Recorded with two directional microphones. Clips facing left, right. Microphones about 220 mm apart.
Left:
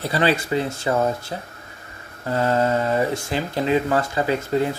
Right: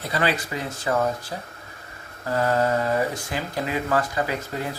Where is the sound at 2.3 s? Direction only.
25° left (ahead or behind).